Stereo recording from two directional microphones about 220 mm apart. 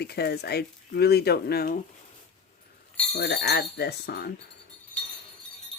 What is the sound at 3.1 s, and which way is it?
Speech, 45° left (ahead or behind).